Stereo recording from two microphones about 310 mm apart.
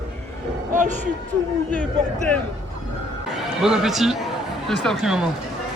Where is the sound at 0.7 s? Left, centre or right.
Right.